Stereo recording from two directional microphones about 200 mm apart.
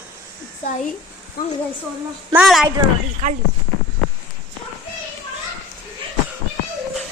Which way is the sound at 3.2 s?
40° right (ahead or behind).